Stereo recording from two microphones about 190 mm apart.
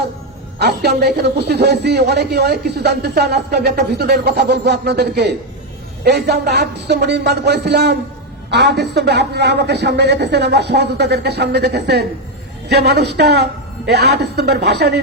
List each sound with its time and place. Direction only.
0.6 s a man's voice: 60° right (ahead or behind)